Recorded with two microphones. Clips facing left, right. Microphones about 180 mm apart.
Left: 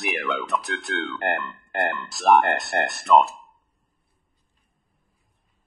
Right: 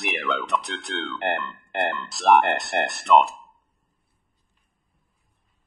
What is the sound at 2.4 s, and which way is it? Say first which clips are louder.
Speech: even; 15° right (ahead or behind).